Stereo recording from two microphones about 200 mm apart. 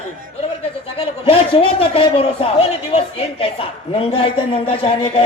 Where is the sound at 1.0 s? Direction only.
30° left (ahead or behind).